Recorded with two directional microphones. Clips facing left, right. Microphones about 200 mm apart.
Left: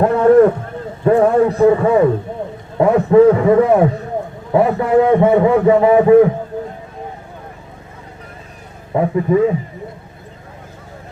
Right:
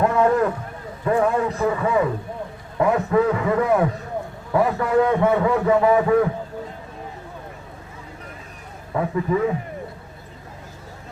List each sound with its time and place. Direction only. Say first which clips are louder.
0.0 s a sound: left 9 dB; 35° left (ahead or behind)
1.0 s a man's voice: left 8 dB; 30° left (ahead or behind)
8.9 s a man's voice: left 7 dB; 30° left (ahead or behind)